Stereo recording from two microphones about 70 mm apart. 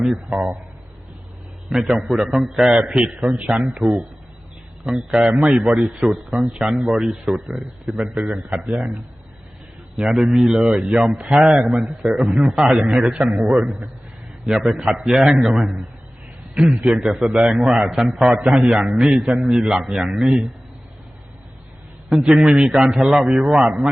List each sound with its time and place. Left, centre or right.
0.0 s a man's voice: centre
1.7 s a man's voice: centre
3.1 s a man's voice: centre
9.9 s a man's voice: centre
11.7 s a man's voice: centre
14.4 s a man's voice: centre
22.3 s a man's voice: centre